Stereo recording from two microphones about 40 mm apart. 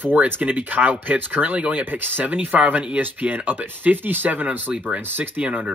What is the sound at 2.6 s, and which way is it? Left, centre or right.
Speech, right.